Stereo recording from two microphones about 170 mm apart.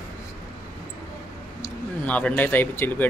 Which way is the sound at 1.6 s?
10° left (ahead or behind).